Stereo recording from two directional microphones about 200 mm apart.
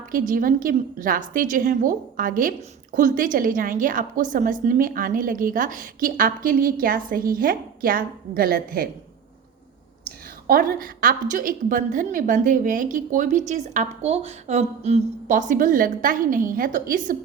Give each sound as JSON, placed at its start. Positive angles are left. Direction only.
{"t": 0.1, "sound": "a woman's voice", "side_deg": -45}
{"t": 10.4, "sound": "a woman's voice", "side_deg": -45}